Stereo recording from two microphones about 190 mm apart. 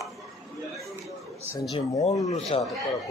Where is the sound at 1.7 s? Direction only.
35° left (ahead or behind).